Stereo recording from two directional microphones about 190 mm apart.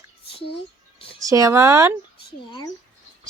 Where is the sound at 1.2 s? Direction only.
15° right (ahead or behind).